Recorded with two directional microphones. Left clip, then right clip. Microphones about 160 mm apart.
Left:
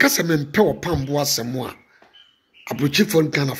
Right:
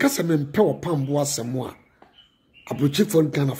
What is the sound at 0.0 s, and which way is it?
Speech, 10° right (ahead or behind).